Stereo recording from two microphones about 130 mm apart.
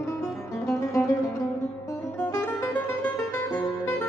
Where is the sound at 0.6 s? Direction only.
20° left (ahead or behind).